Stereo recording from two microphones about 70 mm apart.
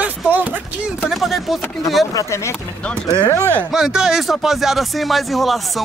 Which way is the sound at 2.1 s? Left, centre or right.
Left.